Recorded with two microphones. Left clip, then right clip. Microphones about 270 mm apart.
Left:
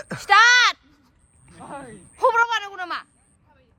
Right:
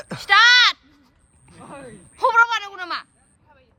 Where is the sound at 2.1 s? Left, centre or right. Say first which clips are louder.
Right 2 dB; centre.